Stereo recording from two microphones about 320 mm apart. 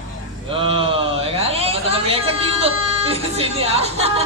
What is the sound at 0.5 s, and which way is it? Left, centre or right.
Speech, centre.